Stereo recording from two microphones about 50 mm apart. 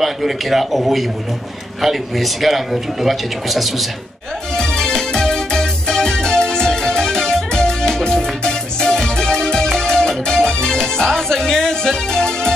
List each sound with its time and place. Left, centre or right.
0.0 s a man's voice: centre
4.6 s music: centre